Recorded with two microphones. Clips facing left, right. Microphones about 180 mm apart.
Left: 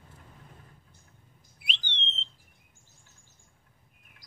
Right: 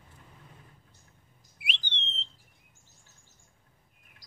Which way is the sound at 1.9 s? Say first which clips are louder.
Left 2 dB; 30° left (ahead or behind).